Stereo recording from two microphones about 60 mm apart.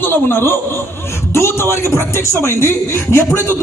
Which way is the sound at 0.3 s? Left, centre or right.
Left.